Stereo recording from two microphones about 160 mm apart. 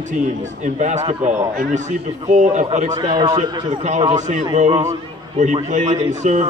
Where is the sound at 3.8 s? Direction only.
45° right (ahead or behind).